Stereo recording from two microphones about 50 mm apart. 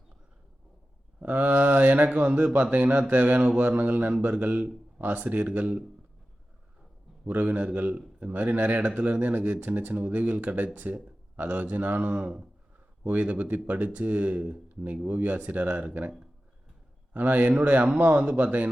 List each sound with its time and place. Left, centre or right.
1.2 s a man's voice: right
7.3 s speech: right
17.2 s speech: right